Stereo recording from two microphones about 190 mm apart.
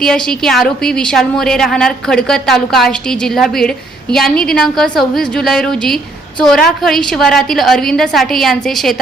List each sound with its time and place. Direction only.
0.0 s a woman's voice: 5° left (ahead or behind)